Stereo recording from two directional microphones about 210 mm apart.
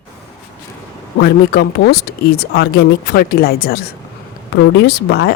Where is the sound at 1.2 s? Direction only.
50° left (ahead or behind).